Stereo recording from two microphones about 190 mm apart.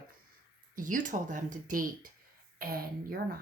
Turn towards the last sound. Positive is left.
turn(degrees=-50)  # may be behind; listen again after turning